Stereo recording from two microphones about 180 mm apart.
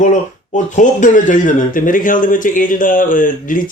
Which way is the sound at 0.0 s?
45° left (ahead or behind).